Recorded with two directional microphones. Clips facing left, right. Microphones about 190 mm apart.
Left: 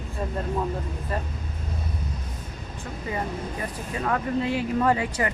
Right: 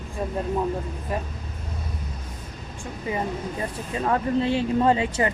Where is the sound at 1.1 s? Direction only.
15° right (ahead or behind).